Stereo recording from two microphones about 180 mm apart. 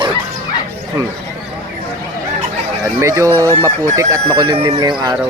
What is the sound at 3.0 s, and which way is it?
Speech, 15° right (ahead or behind).